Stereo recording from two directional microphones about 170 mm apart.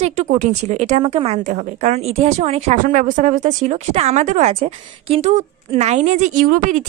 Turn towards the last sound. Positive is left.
turn(degrees=-50)  # may be behind; listen again after turning